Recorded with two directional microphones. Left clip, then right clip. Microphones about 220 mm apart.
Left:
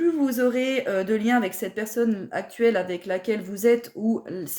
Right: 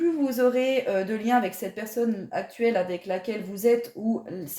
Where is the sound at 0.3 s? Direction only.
30° left (ahead or behind).